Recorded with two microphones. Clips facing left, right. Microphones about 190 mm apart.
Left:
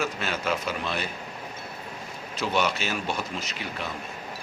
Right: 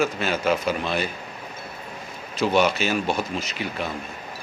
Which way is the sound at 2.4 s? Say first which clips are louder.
Right 6 dB; 35° right (ahead or behind).